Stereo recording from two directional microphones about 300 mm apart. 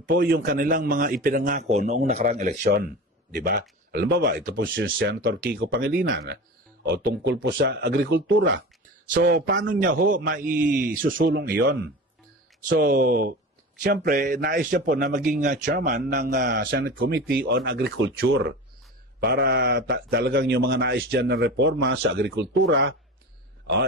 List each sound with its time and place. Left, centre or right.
0.0 s a man's voice: right